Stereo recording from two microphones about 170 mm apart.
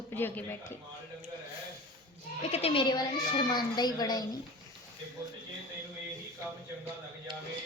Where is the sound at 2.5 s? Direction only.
35° left (ahead or behind).